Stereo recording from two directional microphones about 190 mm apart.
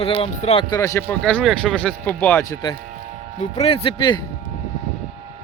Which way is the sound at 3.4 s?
30° left (ahead or behind).